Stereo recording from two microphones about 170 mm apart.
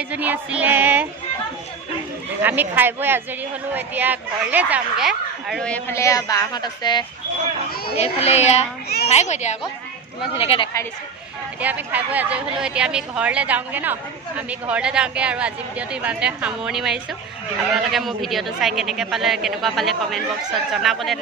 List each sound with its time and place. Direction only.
0.1 s a woman's voice: 10° right (ahead or behind)
2.4 s a woman's voice: 10° right (ahead or behind); by 7.1 s 25° left (ahead or behind)
7.9 s a child's voice: 35° left (ahead or behind)
11.6 s a woman's voice: 10° right (ahead or behind)